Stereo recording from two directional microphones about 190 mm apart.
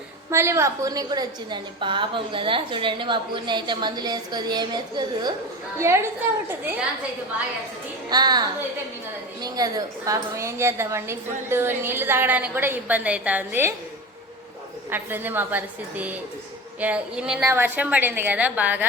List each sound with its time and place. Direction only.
0.3 s a woman's voice: 15° right (ahead or behind)
8.1 s a woman's voice: 20° right (ahead or behind)
14.8 s a woman's voice: 10° right (ahead or behind)